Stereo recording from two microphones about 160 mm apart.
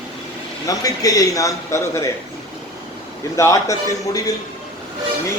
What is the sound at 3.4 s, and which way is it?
Speech, 20° left (ahead or behind).